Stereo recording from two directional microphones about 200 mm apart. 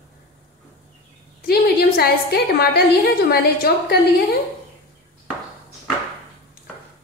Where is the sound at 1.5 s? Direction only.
50° left (ahead or behind).